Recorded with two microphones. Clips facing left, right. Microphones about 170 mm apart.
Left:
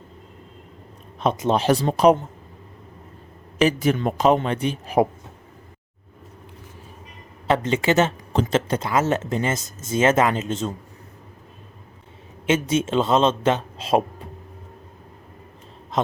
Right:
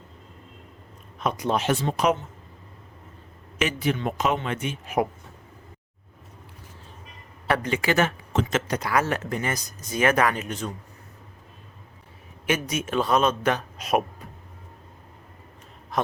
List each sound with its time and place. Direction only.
1.2 s speech: 25° left (ahead or behind)
1.6 s a man's voice: 35° left (ahead or behind)
3.6 s a man's voice: 40° left (ahead or behind)
7.4 s speech: 25° left (ahead or behind)
12.5 s speech: 25° left (ahead or behind)